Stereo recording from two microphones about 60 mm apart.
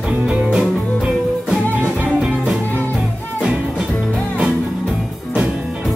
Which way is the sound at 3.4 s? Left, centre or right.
Centre.